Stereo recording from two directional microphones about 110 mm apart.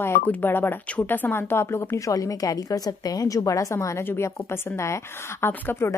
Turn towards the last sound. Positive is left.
turn(degrees=20)  # may be behind; listen again after turning